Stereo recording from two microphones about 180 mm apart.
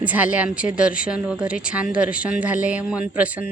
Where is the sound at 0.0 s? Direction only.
10° right (ahead or behind).